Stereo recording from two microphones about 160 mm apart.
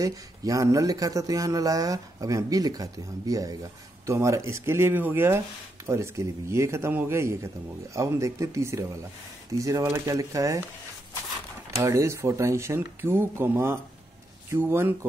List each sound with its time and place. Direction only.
0.0 s speech: 20° right (ahead or behind)
11.7 s speech: 20° right (ahead or behind)